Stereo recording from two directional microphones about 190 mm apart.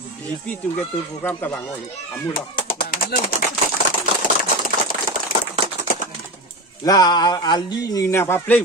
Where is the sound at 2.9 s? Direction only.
45° left (ahead or behind).